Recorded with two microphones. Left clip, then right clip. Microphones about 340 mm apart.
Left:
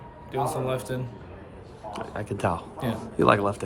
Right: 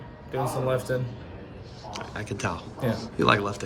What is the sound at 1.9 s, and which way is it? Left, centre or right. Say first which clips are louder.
A man's voice: left 2 dB; centre.